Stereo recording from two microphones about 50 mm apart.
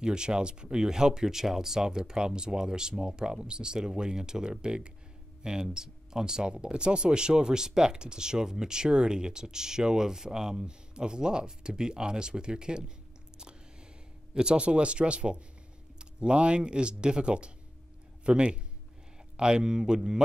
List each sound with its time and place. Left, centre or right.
0.0 s speech: centre
14.3 s speech: centre